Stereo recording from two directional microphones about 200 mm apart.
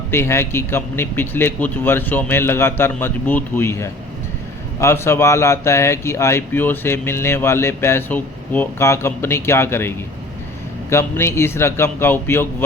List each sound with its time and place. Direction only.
0.1 s a man's voice: 10° left (ahead or behind)